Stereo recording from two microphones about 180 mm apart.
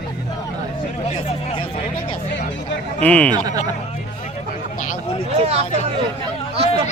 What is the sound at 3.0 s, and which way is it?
Speech, 5° left (ahead or behind).